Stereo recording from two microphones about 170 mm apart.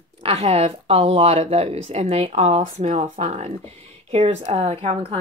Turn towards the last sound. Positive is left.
turn(degrees=-35)  # may be behind; listen again after turning